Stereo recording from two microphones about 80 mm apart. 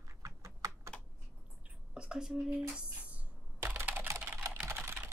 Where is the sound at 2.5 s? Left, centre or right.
Centre.